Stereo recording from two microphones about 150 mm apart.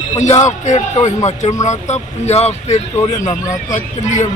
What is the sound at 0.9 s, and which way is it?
Speech, 50° left (ahead or behind).